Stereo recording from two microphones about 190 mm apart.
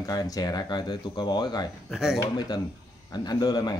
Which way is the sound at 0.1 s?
20° left (ahead or behind).